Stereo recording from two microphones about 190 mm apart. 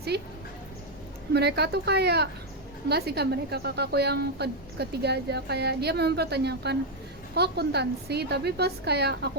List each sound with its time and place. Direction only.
0.1 s a woman's voice: 60° right (ahead or behind)
1.3 s a woman's voice: 60° right (ahead or behind)